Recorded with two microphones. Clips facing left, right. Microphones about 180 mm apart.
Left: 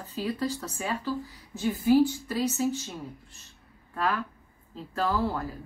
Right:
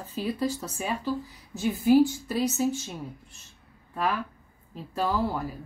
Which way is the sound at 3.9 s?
15° right (ahead or behind).